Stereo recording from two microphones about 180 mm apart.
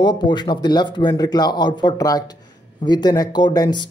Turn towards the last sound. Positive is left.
turn(degrees=25)  # may be behind; listen again after turning